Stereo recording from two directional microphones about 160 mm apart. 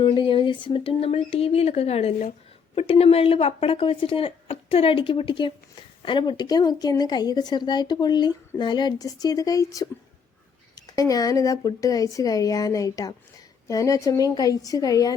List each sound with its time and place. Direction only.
0.0 s a woman's voice: 30° left (ahead or behind)